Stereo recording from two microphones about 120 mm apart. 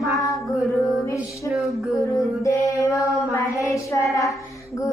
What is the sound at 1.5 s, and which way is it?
Music, centre (ahead or behind).